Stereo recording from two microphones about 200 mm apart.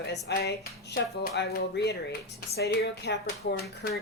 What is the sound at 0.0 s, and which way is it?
Speech, 55° left (ahead or behind).